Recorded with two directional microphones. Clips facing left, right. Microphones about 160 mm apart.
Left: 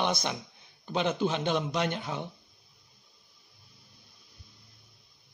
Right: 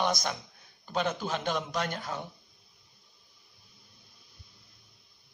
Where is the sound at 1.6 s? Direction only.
20° left (ahead or behind).